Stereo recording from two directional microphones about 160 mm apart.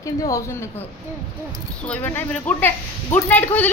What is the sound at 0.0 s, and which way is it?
Speech, 20° left (ahead or behind).